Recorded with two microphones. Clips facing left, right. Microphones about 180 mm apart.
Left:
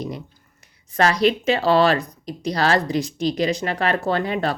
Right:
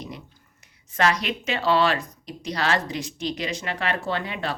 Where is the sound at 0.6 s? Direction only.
35° left (ahead or behind).